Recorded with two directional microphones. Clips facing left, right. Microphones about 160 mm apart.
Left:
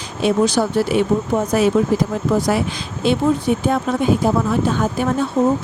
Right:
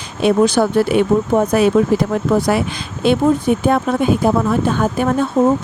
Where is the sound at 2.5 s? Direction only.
65° right (ahead or behind).